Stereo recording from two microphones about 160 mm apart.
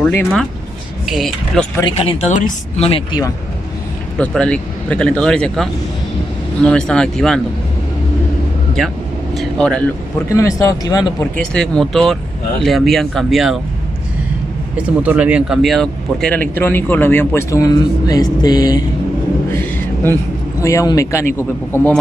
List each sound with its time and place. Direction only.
0.1 s speech: 15° left (ahead or behind)
1.0 s speech: centre (ahead or behind)
1.9 s speech: 35° left (ahead or behind)
4.2 s speech: 5° left (ahead or behind)
8.7 s vehicle: centre (ahead or behind)
10.3 s speech: 20° left (ahead or behind)
11.3 s speech: 5° left (ahead or behind)
14.8 s speech: 10° right (ahead or behind); by 18.9 s 25° left (ahead or behind)
20.6 s speech: 20° left (ahead or behind)